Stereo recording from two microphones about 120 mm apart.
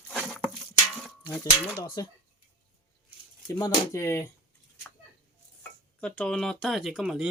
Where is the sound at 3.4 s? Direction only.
25° left (ahead or behind).